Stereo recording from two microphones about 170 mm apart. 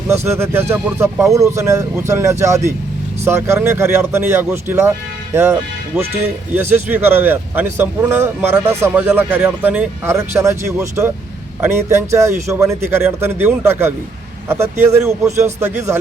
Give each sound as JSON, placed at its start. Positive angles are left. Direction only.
{"t": 0.1, "sound": "speech", "side_deg": -15}